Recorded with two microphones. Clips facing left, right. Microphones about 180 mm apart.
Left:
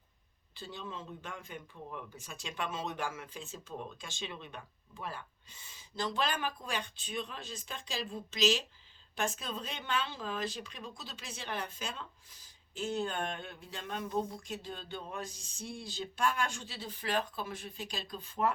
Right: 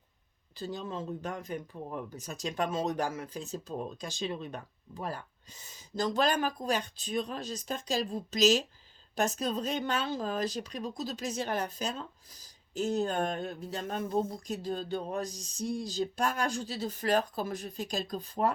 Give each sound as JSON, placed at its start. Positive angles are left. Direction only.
{"t": 0.5, "sound": "speech", "side_deg": -40}